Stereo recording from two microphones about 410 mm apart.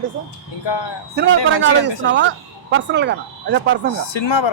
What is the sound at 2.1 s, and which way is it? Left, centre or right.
Speech, right.